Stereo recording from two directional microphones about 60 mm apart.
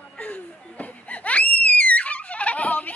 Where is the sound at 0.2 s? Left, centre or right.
Left.